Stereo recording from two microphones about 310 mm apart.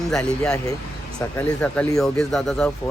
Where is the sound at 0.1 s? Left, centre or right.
Centre.